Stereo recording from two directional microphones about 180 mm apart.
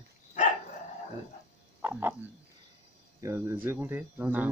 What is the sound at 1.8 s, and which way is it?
Frog, 10° right (ahead or behind).